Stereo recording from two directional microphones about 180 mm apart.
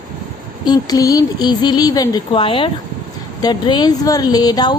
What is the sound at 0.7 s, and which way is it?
Speech, 20° left (ahead or behind).